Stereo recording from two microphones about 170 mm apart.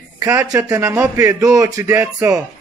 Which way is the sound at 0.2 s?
15° right (ahead or behind).